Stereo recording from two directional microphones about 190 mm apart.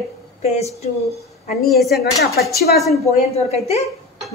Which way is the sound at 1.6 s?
Centre (ahead or behind).